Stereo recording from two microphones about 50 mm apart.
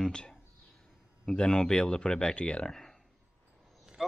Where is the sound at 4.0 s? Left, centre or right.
Centre.